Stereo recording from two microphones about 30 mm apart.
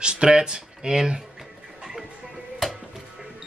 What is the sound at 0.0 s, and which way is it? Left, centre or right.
Speech, right.